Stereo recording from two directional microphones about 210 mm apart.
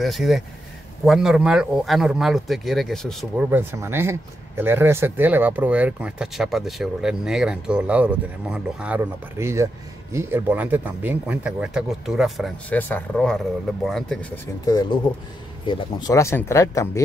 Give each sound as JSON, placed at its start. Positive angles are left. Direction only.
{"t": 0.0, "sound": "speech", "side_deg": 0}
{"t": 3.4, "sound": "speech", "side_deg": -10}
{"t": 14.7, "sound": "speech", "side_deg": 20}